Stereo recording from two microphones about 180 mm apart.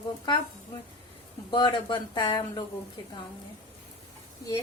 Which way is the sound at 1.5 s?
25° left (ahead or behind).